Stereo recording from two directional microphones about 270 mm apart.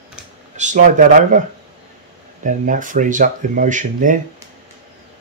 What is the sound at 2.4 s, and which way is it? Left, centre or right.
Speech, right.